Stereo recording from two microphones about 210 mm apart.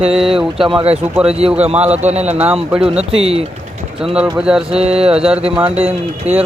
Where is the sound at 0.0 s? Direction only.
25° right (ahead or behind).